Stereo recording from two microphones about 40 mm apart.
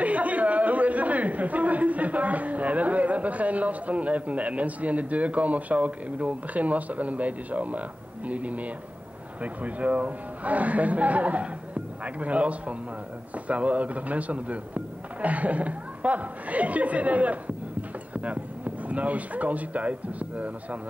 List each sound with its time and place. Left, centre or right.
0.0 s speech: right